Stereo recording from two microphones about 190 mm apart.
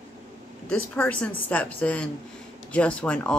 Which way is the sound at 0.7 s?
10° left (ahead or behind).